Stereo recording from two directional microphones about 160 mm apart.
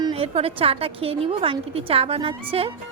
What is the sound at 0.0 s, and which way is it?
A woman's voice, 35° right (ahead or behind).